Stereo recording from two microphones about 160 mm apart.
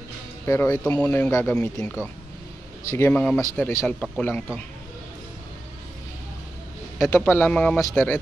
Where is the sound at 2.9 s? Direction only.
15° left (ahead or behind).